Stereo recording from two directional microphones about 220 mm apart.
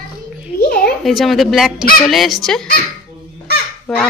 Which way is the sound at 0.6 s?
45° left (ahead or behind).